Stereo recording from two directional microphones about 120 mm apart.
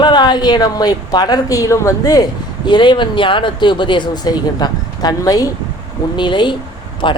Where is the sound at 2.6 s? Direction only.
40° left (ahead or behind).